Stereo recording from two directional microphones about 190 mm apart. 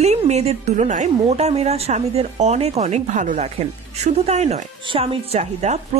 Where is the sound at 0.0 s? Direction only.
35° right (ahead or behind).